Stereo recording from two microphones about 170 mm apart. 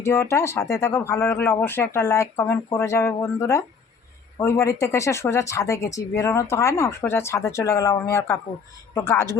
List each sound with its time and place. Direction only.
0.0 s speech: 15° left (ahead or behind)